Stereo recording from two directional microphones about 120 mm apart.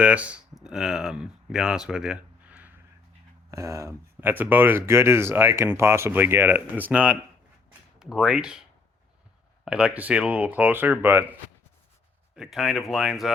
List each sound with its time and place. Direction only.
0.0 s speech: 10° right (ahead or behind)
3.5 s speech: 25° right (ahead or behind); by 8.6 s 5° right (ahead or behind)
9.6 s speech: 10° right (ahead or behind)
12.4 s speech: 5° right (ahead or behind)